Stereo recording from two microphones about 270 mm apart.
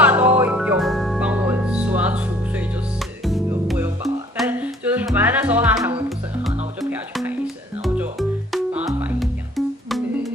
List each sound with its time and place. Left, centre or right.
0.0 s music: centre
6.7 s music: centre